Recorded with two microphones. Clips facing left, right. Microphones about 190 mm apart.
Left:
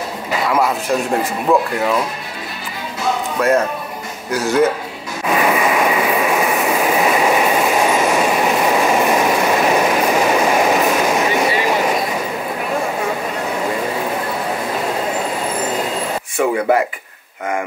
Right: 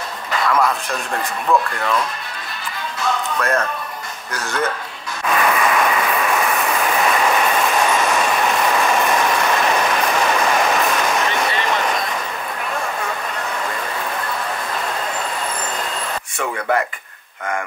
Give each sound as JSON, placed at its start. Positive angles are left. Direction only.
{"t": 0.3, "sound": "speech", "side_deg": 10}
{"t": 3.0, "sound": "music", "side_deg": 5}
{"t": 4.3, "sound": "a man's voice", "side_deg": 5}
{"t": 5.2, "sound": "train", "side_deg": 10}
{"t": 12.7, "sound": "a sound", "side_deg": 20}
{"t": 13.5, "sound": "vehicle", "side_deg": 10}
{"t": 16.5, "sound": "a sound", "side_deg": 15}